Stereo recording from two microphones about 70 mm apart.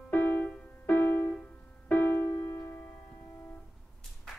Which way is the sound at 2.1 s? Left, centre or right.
Left.